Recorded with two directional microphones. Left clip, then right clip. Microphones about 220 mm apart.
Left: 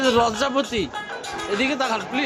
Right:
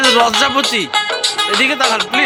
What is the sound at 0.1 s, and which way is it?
Speech, 5° right (ahead or behind).